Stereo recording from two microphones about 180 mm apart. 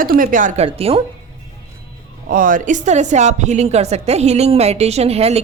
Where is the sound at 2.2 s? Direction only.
50° right (ahead or behind).